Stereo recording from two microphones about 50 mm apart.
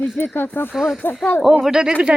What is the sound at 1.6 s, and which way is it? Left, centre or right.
Speech, centre.